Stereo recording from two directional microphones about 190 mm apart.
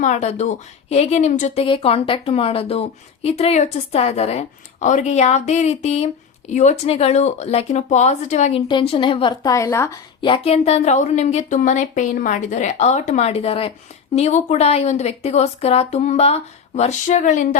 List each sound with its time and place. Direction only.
0.0 s speech: 35° left (ahead or behind); by 10.0 s 15° left (ahead or behind)
10.2 s speech: 25° left (ahead or behind)